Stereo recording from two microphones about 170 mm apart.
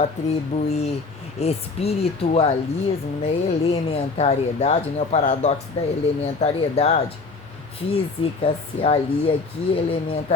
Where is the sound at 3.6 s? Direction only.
40° left (ahead or behind).